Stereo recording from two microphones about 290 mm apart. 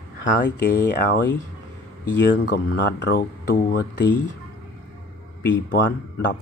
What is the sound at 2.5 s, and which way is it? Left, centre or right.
Speech, left.